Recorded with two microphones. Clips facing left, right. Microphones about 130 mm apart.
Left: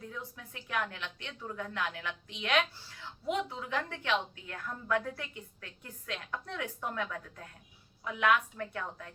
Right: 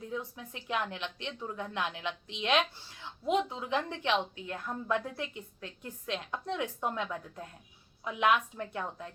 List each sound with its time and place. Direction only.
0.1 s a woman's voice: 20° right (ahead or behind)